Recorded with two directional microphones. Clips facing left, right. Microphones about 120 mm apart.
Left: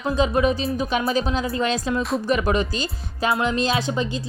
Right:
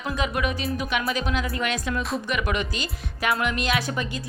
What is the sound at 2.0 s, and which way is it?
Speech, centre (ahead or behind).